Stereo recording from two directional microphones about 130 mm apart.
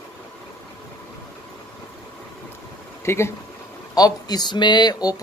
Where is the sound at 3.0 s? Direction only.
20° left (ahead or behind).